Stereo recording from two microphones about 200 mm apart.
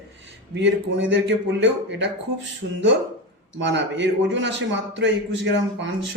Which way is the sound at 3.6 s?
65° right (ahead or behind).